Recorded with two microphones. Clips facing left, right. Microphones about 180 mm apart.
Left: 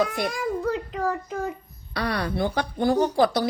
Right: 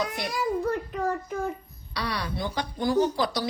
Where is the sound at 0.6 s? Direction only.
75° left (ahead or behind).